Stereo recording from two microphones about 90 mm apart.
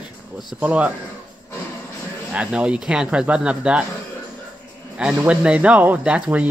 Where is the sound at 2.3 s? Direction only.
10° right (ahead or behind).